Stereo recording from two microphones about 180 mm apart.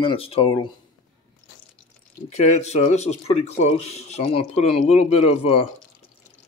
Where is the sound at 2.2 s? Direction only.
40° left (ahead or behind).